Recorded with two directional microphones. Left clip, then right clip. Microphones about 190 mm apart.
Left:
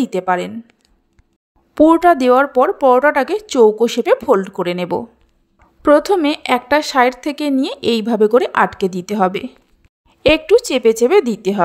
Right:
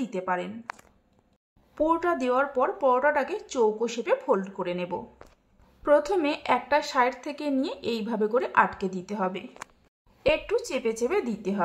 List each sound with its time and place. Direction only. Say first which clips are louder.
0.0 s a woman's voice: left 12 dB; 40° left (ahead or behind)
1.8 s a woman's voice: left 14 dB; 45° left (ahead or behind)